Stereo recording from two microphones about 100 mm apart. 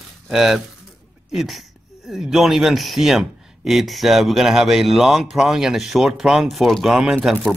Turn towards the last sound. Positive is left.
turn(degrees=-5)  # may be behind; listen again after turning